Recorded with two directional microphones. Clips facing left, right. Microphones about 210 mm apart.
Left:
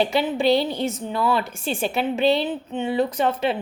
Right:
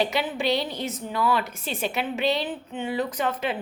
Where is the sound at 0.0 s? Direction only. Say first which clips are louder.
Left 5 dB; 30° left (ahead or behind).